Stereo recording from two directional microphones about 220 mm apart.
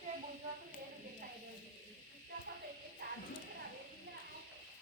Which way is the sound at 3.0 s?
45° right (ahead or behind).